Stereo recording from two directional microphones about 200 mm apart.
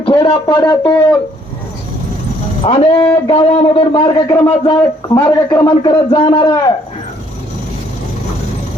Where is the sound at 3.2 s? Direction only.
25° left (ahead or behind).